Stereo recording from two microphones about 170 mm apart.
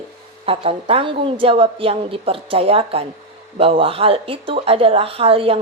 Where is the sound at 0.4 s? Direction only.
35° right (ahead or behind).